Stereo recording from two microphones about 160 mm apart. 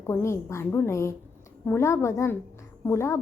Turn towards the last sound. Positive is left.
turn(degrees=15)  # may be behind; listen again after turning